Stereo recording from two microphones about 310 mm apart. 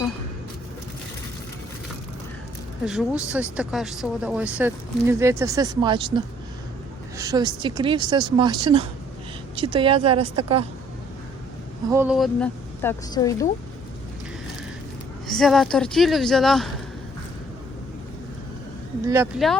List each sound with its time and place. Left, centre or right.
2.8 s speech: centre
7.2 s speech: centre
11.9 s speech: centre
15.3 s speech: centre
19.0 s speech: centre